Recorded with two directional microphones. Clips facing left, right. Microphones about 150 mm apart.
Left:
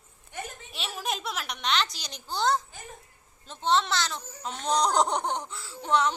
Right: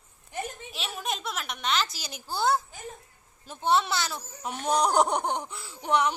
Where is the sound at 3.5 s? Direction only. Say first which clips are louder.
Right 1 dB; 10° right (ahead or behind).